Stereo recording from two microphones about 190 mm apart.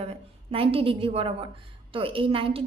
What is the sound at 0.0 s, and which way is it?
A woman's voice, 30° right (ahead or behind).